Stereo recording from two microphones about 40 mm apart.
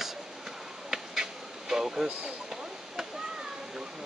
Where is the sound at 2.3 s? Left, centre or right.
Centre.